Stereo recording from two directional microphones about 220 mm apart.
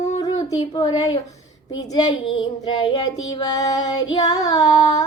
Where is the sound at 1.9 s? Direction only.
20° left (ahead or behind).